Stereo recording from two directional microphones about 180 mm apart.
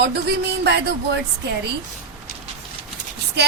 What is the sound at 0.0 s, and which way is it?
Speech, 65° right (ahead or behind).